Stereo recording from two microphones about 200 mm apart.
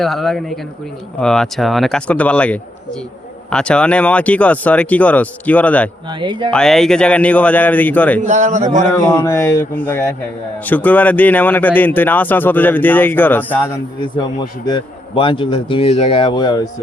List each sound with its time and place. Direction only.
0.0 s speech: centre (ahead or behind)
6.1 s speech: 25° right (ahead or behind)
6.5 s speech: 5° left (ahead or behind)
8.2 s a man's voice: 35° right (ahead or behind)
8.9 s speech: 15° left (ahead or behind)
14.0 s a man's voice: 20° left (ahead or behind)